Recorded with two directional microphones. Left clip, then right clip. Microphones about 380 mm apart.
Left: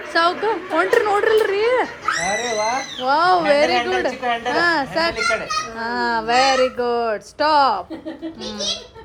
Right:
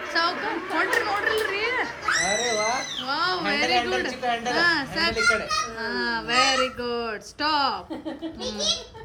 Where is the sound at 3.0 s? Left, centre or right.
Centre.